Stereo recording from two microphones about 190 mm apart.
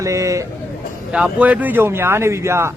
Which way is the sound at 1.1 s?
5° right (ahead or behind).